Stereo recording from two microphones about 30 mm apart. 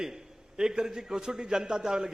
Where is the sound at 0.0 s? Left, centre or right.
Right.